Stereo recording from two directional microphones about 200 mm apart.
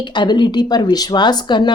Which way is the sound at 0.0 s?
20° left (ahead or behind).